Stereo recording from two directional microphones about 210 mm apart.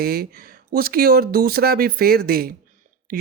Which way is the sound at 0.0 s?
45° right (ahead or behind).